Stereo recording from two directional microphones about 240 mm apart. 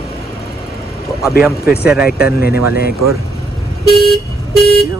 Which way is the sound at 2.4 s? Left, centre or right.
Left.